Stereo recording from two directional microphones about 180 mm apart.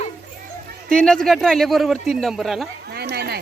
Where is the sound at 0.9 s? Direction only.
5° left (ahead or behind).